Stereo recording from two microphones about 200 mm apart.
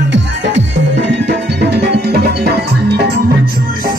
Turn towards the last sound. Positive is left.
turn(degrees=-55)  # may be behind; listen again after turning